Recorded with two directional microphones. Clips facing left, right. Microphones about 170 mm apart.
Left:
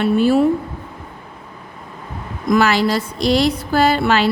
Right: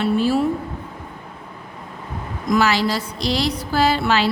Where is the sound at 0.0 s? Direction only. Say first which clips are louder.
Left 4 dB; 55° left (ahead or behind).